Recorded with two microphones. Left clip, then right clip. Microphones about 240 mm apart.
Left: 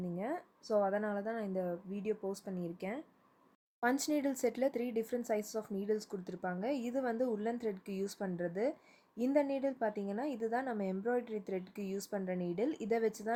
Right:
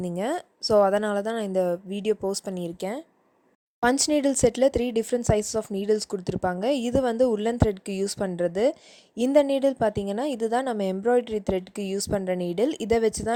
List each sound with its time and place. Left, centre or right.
0.0 s speech: right